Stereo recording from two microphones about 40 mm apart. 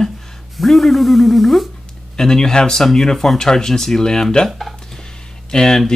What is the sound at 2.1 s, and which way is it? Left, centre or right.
Speech, centre.